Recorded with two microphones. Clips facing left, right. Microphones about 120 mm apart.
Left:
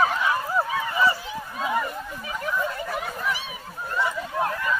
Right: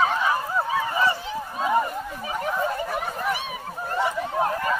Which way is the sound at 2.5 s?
35° right (ahead or behind).